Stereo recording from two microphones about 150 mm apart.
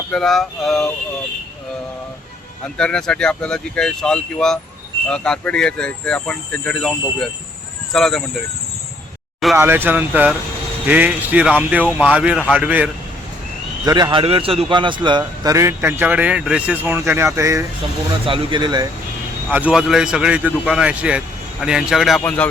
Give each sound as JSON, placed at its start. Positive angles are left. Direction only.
{"t": 0.1, "sound": "speech", "side_deg": 0}
{"t": 2.7, "sound": "speech", "side_deg": 5}
{"t": 7.9, "sound": "speech", "side_deg": 0}
{"t": 9.6, "sound": "speech", "side_deg": -15}
{"t": 13.8, "sound": "a man's voice", "side_deg": -30}
{"t": 15.4, "sound": "speech", "side_deg": -20}
{"t": 18.1, "sound": "speech", "side_deg": -35}
{"t": 19.5, "sound": "speech", "side_deg": -10}
{"t": 22.2, "sound": "speech", "side_deg": 10}